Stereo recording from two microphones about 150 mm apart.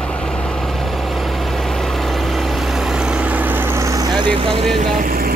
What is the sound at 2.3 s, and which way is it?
Vehicle, centre (ahead or behind).